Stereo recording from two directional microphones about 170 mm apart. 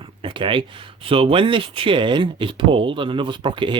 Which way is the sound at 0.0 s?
30° right (ahead or behind).